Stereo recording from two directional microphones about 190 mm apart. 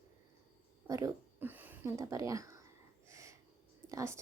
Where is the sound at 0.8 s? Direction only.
15° right (ahead or behind).